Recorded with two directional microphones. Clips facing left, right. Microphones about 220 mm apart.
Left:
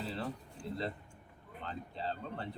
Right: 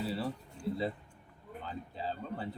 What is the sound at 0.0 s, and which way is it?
Speech, 5° right (ahead or behind).